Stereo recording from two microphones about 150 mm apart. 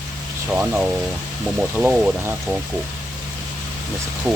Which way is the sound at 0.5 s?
10° right (ahead or behind).